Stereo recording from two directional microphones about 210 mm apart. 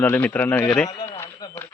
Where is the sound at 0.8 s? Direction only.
20° left (ahead or behind).